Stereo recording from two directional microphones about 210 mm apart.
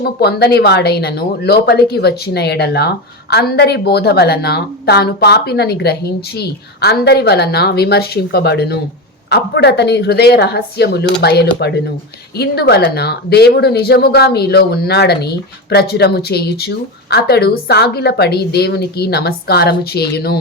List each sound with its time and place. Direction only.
0.0 s speech: 50° left (ahead or behind)